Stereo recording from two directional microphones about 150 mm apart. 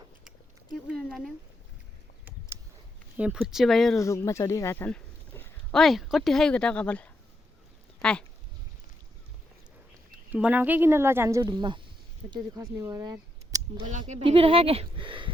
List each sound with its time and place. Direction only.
0.3 s a sound: 5° right (ahead or behind)
3.3 s speech: centre (ahead or behind)
3.9 s speech: 20° left (ahead or behind)
5.7 s speech: centre (ahead or behind)
10.3 s speech: 10° right (ahead or behind)
14.1 s speech: 40° right (ahead or behind)